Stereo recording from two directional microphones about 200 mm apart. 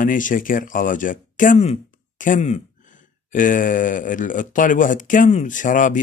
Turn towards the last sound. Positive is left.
turn(degrees=40)  # may be behind; listen again after turning